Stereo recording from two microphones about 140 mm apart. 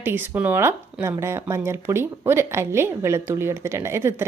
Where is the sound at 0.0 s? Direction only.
15° right (ahead or behind).